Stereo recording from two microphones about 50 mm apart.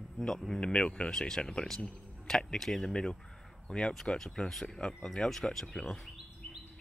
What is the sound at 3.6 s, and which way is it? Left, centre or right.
Speech, centre.